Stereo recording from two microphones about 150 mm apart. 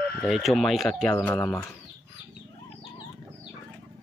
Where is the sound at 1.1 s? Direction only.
10° left (ahead or behind).